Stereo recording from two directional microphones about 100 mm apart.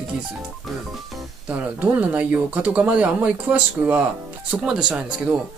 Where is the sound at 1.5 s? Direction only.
15° right (ahead or behind).